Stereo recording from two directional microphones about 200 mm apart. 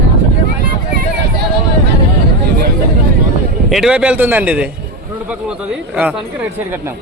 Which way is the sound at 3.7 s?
5° right (ahead or behind).